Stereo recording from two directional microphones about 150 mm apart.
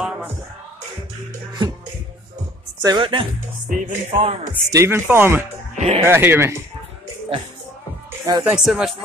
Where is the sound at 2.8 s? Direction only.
30° right (ahead or behind).